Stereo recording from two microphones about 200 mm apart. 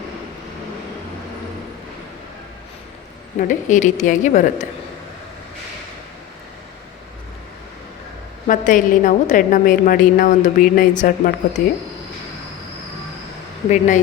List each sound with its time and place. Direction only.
3.3 s a woman's voice: 40° left (ahead or behind)
8.4 s a woman's voice: 40° left (ahead or behind)
13.7 s a woman's voice: 35° left (ahead or behind)